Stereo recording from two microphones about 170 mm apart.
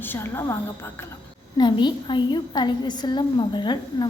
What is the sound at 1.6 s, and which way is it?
A woman's voice, 25° left (ahead or behind).